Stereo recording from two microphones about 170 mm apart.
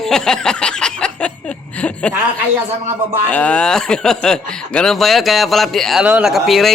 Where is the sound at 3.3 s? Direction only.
5° left (ahead or behind).